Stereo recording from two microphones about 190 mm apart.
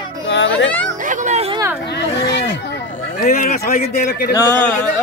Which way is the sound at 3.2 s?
45° left (ahead or behind).